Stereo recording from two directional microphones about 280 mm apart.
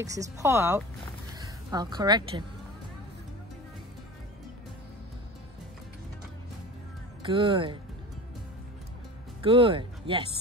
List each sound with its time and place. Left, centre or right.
0.0 s speech: centre
7.2 s speech: centre
9.4 s speech: centre